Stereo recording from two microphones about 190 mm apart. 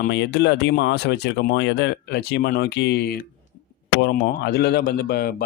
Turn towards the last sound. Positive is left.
turn(degrees=55)  # may be behind; listen again after turning